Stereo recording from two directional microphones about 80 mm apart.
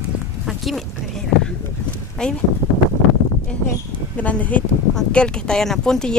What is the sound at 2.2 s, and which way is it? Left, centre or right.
Speech, centre.